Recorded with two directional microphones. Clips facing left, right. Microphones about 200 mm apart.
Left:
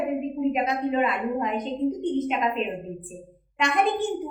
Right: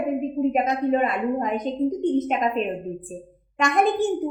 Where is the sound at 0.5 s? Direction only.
45° right (ahead or behind).